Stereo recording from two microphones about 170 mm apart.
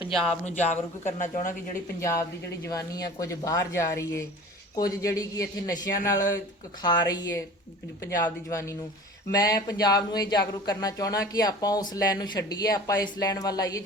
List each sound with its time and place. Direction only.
0.0 s speech: centre (ahead or behind)
0.4 s speech: 40° left (ahead or behind)
2.0 s speech: 15° left (ahead or behind)